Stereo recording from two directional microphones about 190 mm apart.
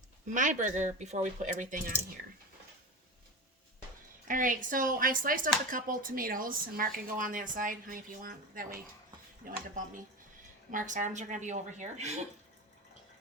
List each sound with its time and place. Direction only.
0.3 s speech: 40° right (ahead or behind)
4.3 s speech: 45° right (ahead or behind)